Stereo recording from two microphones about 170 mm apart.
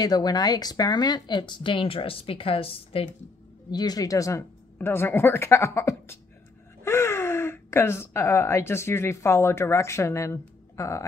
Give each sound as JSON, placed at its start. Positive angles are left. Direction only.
{"t": 0.0, "sound": "speech", "side_deg": 25}
{"t": 3.7, "sound": "a woman's voice", "side_deg": 25}